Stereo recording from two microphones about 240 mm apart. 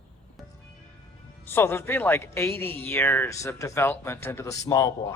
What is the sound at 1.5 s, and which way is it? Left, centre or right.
Speech, centre.